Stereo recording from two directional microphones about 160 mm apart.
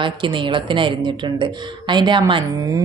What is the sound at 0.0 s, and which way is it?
A woman's voice, 30° right (ahead or behind).